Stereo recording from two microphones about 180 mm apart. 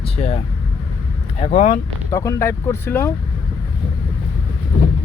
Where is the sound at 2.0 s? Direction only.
15° left (ahead or behind).